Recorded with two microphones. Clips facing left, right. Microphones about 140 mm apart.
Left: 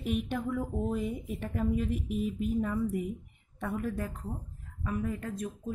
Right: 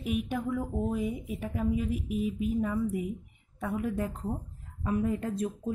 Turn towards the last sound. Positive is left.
turn(degrees=-25)  # may be behind; listen again after turning